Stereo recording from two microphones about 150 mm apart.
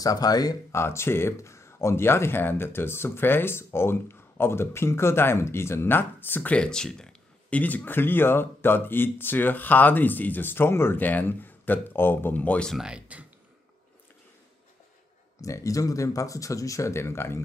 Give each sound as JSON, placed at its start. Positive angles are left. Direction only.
{"t": 0.0, "sound": "speech", "side_deg": 25}
{"t": 15.4, "sound": "speech", "side_deg": 20}